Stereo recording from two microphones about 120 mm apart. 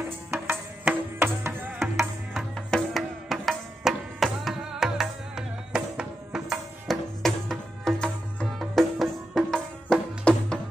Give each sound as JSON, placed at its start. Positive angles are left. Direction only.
{"t": 0.3, "sound": "music", "side_deg": -15}
{"t": 2.0, "sound": "music", "side_deg": 5}